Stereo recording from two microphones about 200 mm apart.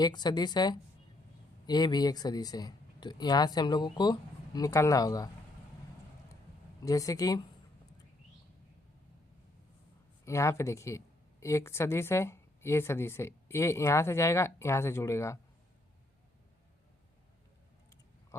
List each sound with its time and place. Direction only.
0.0 s speech: 20° left (ahead or behind)
6.8 s speech: 15° left (ahead or behind)
10.2 s speech: 15° left (ahead or behind)